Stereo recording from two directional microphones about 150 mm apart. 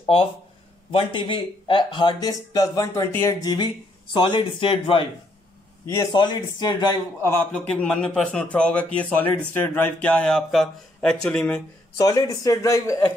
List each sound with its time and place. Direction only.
0.9 s speech: 35° left (ahead or behind)
4.1 s speech: 35° left (ahead or behind)
6.1 s speech: 30° left (ahead or behind)
7.2 s a man's voice: 15° left (ahead or behind)
12.0 s speech: 25° left (ahead or behind)